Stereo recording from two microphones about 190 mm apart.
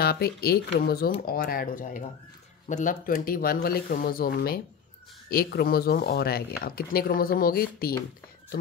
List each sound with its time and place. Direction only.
0.0 s speech: 55° left (ahead or behind)